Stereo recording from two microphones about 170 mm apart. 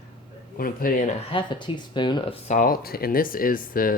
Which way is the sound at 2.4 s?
50° left (ahead or behind).